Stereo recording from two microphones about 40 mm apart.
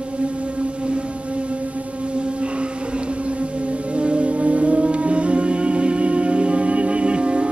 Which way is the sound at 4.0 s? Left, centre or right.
Right.